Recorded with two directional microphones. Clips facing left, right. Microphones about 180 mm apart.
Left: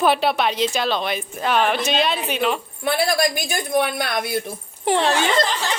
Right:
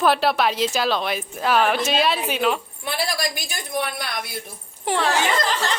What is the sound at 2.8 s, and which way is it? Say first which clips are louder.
Speech: left 8 dB; 50° left (ahead or behind).